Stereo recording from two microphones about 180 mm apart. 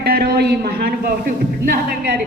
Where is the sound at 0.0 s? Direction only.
60° right (ahead or behind).